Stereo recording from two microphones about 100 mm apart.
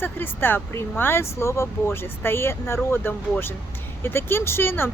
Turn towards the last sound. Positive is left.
turn(degrees=20)  # may be behind; listen again after turning